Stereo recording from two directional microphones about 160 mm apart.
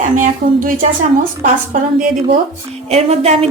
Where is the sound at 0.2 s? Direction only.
55° right (ahead or behind).